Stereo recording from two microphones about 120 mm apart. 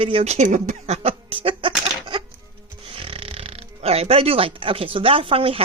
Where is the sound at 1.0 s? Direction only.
55° right (ahead or behind).